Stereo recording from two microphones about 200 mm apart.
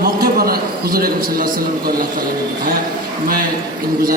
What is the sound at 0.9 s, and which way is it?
Speech, 45° right (ahead or behind).